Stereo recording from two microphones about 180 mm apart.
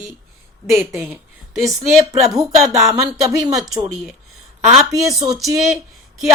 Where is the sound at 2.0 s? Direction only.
20° right (ahead or behind).